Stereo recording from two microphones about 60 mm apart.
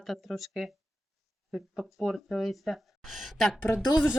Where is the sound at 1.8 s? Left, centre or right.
Centre.